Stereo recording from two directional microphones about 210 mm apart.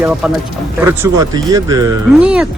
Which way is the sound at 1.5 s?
15° right (ahead or behind).